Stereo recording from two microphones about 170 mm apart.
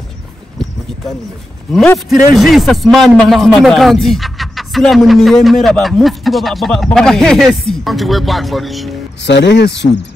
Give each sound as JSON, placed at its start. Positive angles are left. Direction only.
{"t": 1.7, "sound": "a man's voice", "side_deg": 0}
{"t": 9.2, "sound": "speech", "side_deg": 90}